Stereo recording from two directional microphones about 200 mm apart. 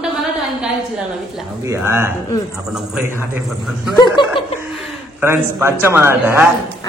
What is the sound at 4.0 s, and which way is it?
Chuckle, 20° left (ahead or behind).